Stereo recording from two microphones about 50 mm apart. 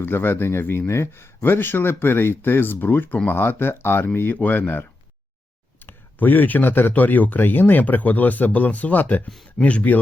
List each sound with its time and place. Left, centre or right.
0.0 s speech: left
0.9 s speech: left
4.4 s speech: left